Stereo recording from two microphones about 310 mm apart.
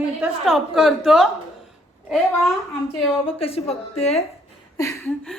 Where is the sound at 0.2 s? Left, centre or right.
Centre.